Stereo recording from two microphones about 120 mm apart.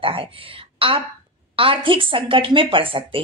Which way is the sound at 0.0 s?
50° right (ahead or behind).